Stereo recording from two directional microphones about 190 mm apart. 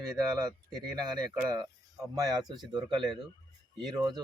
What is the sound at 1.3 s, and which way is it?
Speech, 20° right (ahead or behind).